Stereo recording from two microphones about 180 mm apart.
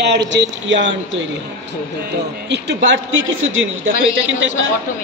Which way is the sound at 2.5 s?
80° right.